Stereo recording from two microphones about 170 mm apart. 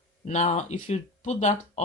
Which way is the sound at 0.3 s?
40° left (ahead or behind).